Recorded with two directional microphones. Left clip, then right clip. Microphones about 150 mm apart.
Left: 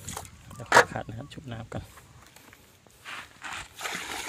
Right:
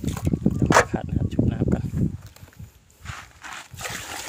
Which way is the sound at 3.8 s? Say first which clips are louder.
Right 2 dB; 40° right (ahead or behind).